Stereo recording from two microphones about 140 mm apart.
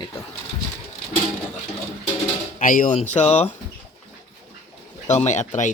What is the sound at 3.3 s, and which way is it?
Speech, 50° left (ahead or behind).